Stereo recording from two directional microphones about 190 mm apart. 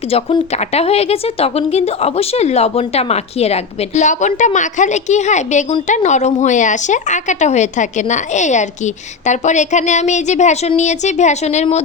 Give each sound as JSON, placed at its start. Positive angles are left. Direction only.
{"t": 0.1, "sound": "a woman's voice", "side_deg": 30}